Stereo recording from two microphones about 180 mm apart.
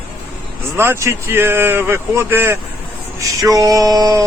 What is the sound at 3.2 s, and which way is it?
Male singing, 20° right (ahead or behind).